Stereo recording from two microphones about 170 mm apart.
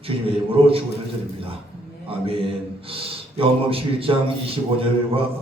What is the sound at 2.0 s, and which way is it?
A man's voice, 35° right (ahead or behind).